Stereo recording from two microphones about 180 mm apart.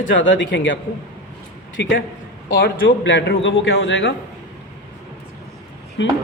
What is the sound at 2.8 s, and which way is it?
Speech, 90° left.